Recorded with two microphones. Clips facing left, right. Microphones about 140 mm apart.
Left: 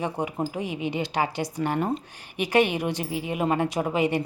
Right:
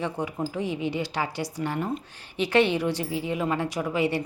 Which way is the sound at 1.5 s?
50° left (ahead or behind).